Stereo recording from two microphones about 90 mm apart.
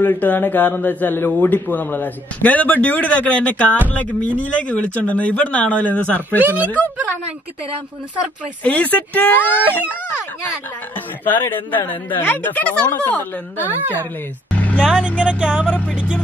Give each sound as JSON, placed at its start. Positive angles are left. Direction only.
{"t": 0.0, "sound": "a man's voice", "side_deg": 20}
{"t": 8.6, "sound": "speech", "side_deg": 15}
{"t": 11.2, "sound": "a man's voice", "side_deg": 20}
{"t": 13.7, "sound": "a woman's voice", "side_deg": -20}
{"t": 14.5, "sound": "vehicle", "side_deg": 15}
{"t": 14.9, "sound": "speech", "side_deg": -10}